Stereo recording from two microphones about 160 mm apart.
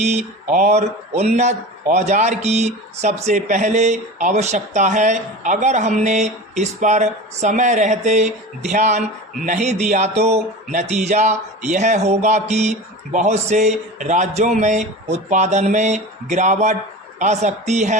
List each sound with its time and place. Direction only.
0.5 s a man's voice: 45° right (ahead or behind)